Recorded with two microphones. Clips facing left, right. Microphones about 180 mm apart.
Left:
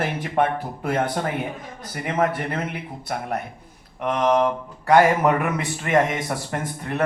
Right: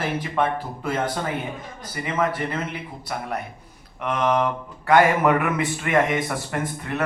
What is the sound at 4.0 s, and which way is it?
Speech, 40° left (ahead or behind).